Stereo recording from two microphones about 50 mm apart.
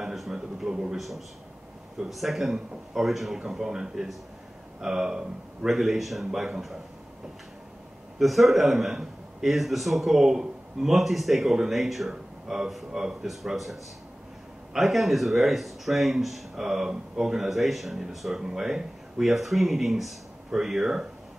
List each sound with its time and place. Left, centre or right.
0.0 s a sound: centre
0.9 s a man's voice: centre
8.2 s a man's voice: centre